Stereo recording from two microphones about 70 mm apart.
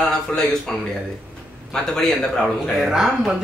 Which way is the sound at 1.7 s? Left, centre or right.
Centre.